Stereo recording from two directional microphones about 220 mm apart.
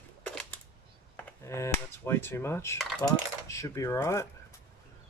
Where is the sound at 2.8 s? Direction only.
Centre (ahead or behind).